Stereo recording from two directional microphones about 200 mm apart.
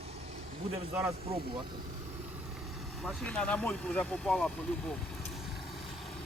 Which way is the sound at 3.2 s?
5° left (ahead or behind).